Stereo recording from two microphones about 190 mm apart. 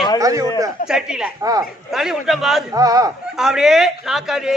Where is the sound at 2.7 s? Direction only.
20° right (ahead or behind).